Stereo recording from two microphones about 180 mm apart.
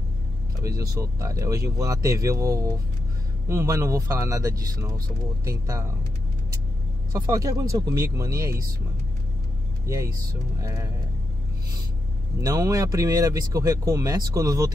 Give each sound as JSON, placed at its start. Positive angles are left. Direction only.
{"t": 0.7, "sound": "speech", "side_deg": -15}
{"t": 7.2, "sound": "speech", "side_deg": -20}
{"t": 10.6, "sound": "speech", "side_deg": -15}
{"t": 12.4, "sound": "speech", "side_deg": -15}